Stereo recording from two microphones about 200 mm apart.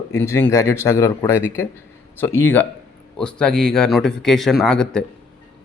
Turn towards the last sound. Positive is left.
turn(degrees=5)  # may be behind; listen again after turning